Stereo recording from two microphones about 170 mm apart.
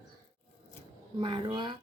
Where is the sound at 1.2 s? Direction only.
30° right (ahead or behind).